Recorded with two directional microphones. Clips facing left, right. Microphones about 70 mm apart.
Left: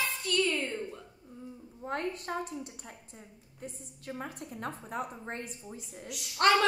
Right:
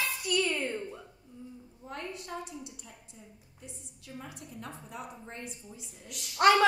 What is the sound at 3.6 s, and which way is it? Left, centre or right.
A woman's voice, left.